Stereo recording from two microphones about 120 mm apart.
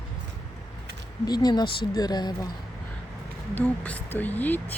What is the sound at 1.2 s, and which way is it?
Speech, 35° left (ahead or behind).